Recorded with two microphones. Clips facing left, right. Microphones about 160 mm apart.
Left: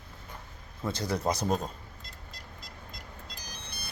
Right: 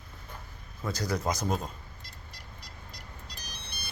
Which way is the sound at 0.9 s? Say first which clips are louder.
Left 1 dB; 25° left (ahead or behind).